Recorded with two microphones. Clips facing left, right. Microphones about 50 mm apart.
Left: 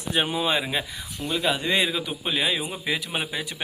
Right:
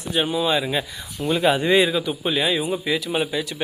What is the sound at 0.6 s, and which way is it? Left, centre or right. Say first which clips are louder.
Speech: right 4 dB; centre.